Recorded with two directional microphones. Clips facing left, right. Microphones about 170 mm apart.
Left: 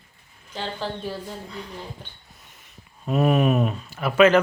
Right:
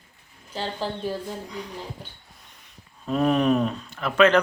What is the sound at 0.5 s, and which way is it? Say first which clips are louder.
Speech: right 1 dB; 35° right (ahead or behind).